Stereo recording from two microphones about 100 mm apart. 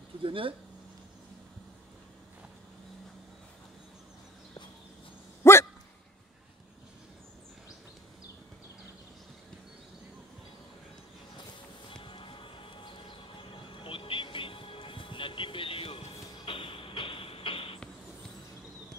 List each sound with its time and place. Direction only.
0.2 s speech: 60° right (ahead or behind)
5.4 s a sound: 25° left (ahead or behind)
11.9 s music: 55° left (ahead or behind)